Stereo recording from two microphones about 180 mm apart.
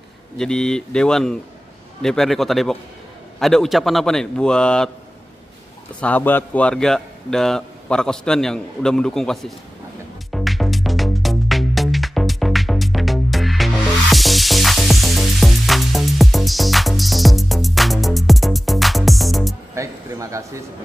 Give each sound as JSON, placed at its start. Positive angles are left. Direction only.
{"t": 0.4, "sound": "a man's voice", "side_deg": 5}
{"t": 5.9, "sound": "a man's voice", "side_deg": 10}
{"t": 10.3, "sound": "music", "side_deg": 0}
{"t": 19.7, "sound": "a sound", "side_deg": -15}